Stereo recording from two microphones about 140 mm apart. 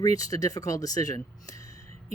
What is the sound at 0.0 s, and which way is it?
Speech, 25° left (ahead or behind).